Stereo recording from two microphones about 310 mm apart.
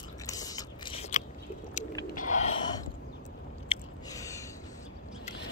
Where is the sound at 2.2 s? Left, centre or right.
Left.